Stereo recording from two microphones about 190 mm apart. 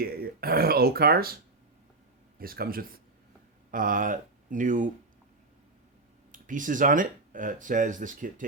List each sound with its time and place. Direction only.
0.0 s speech: 55° right (ahead or behind)
2.4 s speech: 50° right (ahead or behind)
6.3 s speech: 45° right (ahead or behind)